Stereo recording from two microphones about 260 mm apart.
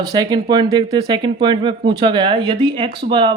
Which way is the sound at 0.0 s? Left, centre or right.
Centre.